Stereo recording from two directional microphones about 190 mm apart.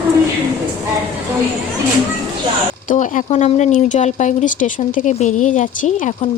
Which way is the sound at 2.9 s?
40° left (ahead or behind).